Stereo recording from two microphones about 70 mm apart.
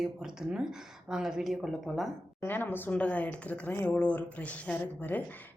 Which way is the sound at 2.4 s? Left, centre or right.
Left.